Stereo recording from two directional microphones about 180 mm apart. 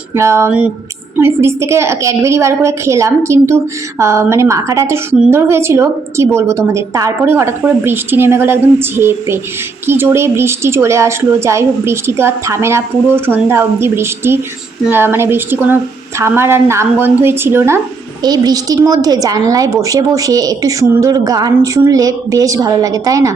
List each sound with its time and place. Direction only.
0.1 s a woman's voice: 15° right (ahead or behind)